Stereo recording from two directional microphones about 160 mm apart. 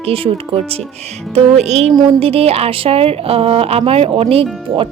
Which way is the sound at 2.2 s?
35° right (ahead or behind).